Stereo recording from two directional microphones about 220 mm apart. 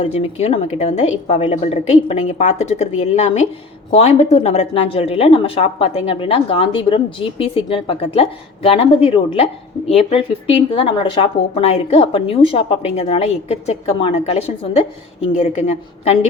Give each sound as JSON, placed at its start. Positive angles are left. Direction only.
{"t": 0.0, "sound": "a woman's voice", "side_deg": 30}